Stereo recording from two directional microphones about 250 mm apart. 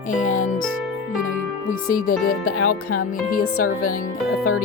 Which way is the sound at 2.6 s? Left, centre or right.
Left.